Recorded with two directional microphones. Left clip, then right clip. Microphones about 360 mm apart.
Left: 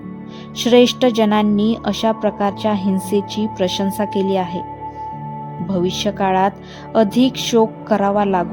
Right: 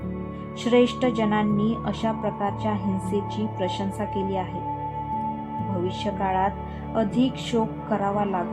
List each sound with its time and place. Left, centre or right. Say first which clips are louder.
0.6 s a woman's voice: left 8 dB; left
5.8 s a woman's voice: left 9 dB; left